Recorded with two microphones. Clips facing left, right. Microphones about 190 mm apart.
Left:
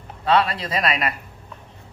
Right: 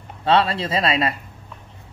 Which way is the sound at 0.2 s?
25° right (ahead or behind).